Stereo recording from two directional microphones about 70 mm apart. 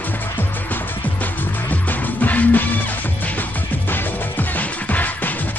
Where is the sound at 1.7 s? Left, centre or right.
Left.